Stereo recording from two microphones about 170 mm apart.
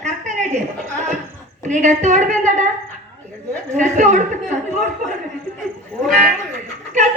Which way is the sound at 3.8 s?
45° right (ahead or behind).